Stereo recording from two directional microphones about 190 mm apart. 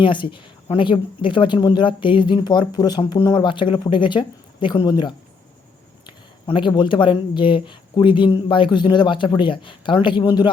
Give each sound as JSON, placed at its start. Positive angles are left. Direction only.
{"t": 0.0, "sound": "speech", "side_deg": 25}